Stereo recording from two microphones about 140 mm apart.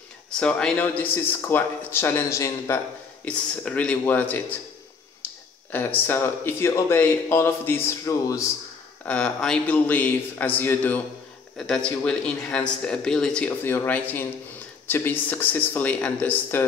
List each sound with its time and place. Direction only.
0.3 s speech: 5° left (ahead or behind)
3.3 s speech: 10° left (ahead or behind)
5.7 s speech: 15° left (ahead or behind)
9.0 s speech: 10° left (ahead or behind)
11.5 s speech: 5° left (ahead or behind)